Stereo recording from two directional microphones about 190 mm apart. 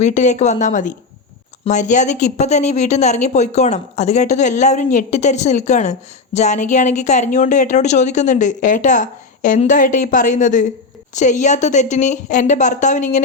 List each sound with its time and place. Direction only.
0.0 s speech: 40° left (ahead or behind)